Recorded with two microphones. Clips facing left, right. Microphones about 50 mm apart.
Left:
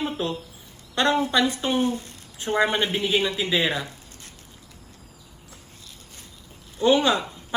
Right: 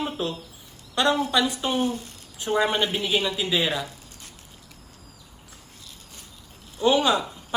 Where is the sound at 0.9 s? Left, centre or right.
Left.